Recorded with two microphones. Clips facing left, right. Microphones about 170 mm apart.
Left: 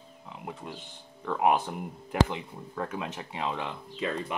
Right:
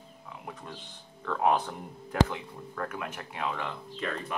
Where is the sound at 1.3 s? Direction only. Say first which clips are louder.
Left 1 dB; 15° left (ahead or behind).